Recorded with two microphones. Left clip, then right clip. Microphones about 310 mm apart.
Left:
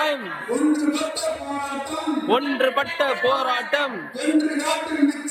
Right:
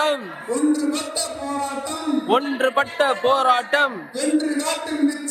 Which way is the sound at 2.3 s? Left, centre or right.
Centre.